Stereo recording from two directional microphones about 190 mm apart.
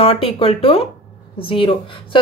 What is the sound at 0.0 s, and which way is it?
Speech, 30° left (ahead or behind).